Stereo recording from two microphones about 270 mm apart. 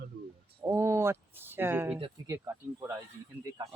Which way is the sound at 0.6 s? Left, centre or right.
Centre.